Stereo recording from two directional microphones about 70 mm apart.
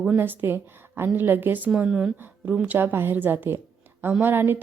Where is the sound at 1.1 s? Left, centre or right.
Right.